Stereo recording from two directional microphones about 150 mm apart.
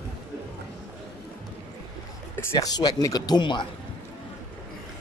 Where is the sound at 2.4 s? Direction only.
25° left (ahead or behind).